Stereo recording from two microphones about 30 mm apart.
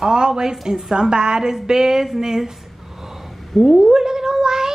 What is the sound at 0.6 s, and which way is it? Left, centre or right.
Speech, centre.